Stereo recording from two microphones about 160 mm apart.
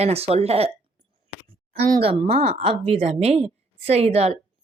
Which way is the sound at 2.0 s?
35° right (ahead or behind).